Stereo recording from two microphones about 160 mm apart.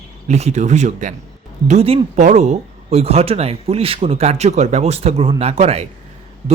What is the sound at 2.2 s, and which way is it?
Speech, 50° right (ahead or behind).